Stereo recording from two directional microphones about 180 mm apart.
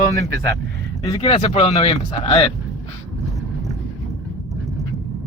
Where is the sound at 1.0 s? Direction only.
25° left (ahead or behind).